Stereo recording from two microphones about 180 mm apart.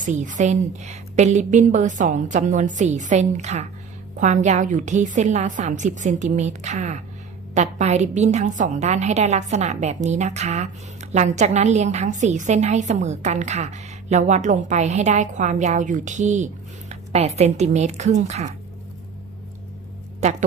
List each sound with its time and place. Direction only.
0.0 s a woman's voice: 45° right (ahead or behind)